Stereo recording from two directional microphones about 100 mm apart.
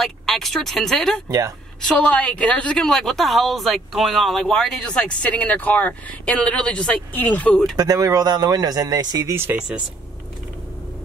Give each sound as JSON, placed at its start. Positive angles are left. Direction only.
{"t": 0.0, "sound": "a woman's voice", "side_deg": 0}
{"t": 7.7, "sound": "speech", "side_deg": -40}